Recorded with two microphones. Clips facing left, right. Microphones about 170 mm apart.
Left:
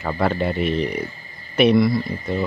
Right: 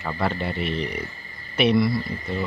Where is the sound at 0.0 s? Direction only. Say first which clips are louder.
Left 5 dB; 50° left (ahead or behind).